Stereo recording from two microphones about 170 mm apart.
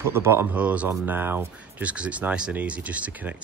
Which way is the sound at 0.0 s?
15° right (ahead or behind).